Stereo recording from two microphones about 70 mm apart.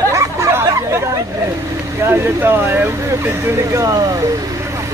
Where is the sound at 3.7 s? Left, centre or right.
Right.